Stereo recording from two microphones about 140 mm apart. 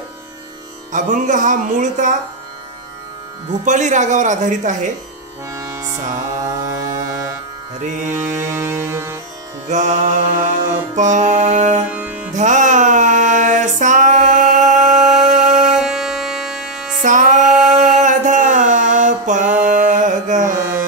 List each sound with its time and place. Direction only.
0.9 s speech: 65° right (ahead or behind)
3.6 s speech: 60° right (ahead or behind)
5.5 s music: 20° right (ahead or behind)
7.8 s speech: 60° right (ahead or behind)
8.1 s music: 20° right (ahead or behind)
9.7 s music: 60° right (ahead or behind)
11.8 s music: 10° right (ahead or behind)
12.3 s music: 60° right (ahead or behind)
15.7 s music: 5° right (ahead or behind)
17.0 s music: 65° right (ahead or behind)